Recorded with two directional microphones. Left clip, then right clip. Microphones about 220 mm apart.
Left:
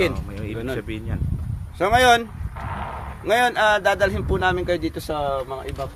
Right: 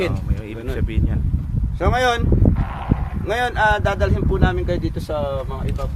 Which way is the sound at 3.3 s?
30° left (ahead or behind).